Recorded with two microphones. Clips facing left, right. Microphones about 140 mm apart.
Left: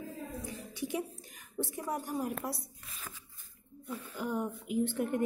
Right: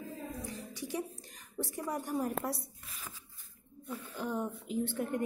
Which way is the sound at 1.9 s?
5° left (ahead or behind).